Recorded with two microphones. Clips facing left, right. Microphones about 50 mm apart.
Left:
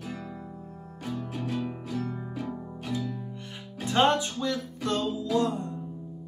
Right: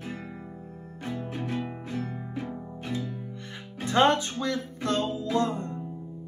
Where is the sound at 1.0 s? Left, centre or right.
Right.